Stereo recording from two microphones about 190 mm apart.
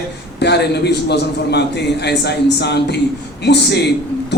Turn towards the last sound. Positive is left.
turn(degrees=60)  # may be behind; listen again after turning